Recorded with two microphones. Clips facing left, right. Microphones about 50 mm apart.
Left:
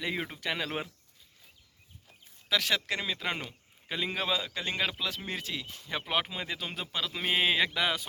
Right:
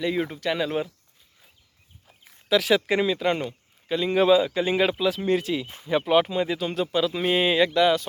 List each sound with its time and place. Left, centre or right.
0.0 s speech: centre
2.5 s speech: centre
4.1 s speech: centre
5.6 s speech: right
5.9 s speech: centre